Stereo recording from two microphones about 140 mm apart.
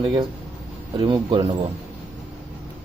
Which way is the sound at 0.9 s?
35° right (ahead or behind).